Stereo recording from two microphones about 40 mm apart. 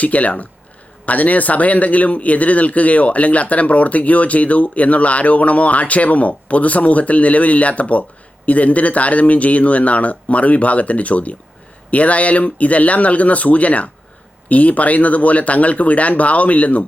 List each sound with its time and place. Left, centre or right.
0.0 s speech: left